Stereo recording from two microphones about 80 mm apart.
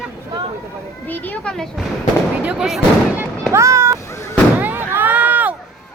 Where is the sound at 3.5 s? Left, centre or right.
Right.